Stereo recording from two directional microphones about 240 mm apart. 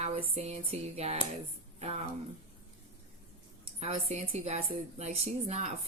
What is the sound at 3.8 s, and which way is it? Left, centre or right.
Speech, right.